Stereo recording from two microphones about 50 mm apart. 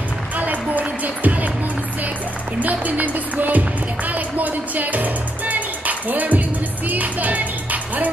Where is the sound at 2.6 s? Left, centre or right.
Right.